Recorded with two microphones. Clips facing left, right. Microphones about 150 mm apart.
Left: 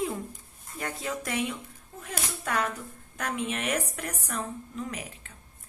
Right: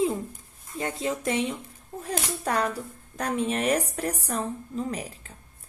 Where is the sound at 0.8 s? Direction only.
20° right (ahead or behind).